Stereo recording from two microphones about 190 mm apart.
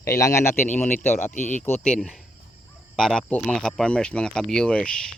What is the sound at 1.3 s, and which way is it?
Speech, 40° left (ahead or behind).